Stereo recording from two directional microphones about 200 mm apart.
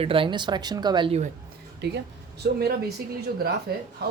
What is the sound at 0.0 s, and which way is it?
Speech, 25° right (ahead or behind).